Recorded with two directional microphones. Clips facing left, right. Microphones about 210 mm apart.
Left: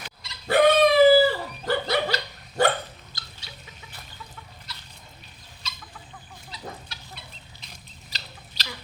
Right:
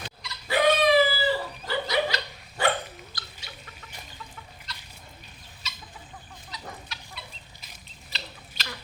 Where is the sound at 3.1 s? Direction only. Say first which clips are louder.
Right 2 dB; 25° left (ahead or behind).